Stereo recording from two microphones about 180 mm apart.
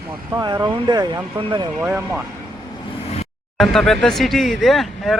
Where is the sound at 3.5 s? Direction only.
Centre (ahead or behind).